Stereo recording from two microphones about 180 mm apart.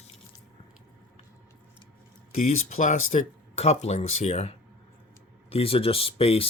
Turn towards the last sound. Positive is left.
turn(degrees=30)  # may be behind; listen again after turning